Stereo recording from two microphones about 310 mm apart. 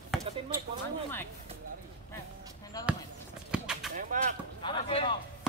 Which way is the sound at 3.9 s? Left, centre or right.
Right.